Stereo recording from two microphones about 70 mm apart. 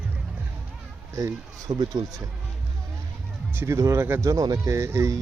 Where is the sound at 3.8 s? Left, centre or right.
Right.